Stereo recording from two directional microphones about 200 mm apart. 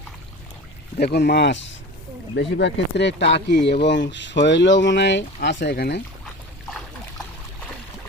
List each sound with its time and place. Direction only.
0.9 s speech: 55° left (ahead or behind)